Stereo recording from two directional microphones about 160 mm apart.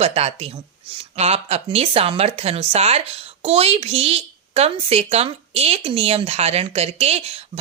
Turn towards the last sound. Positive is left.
turn(degrees=-40)  # may be behind; listen again after turning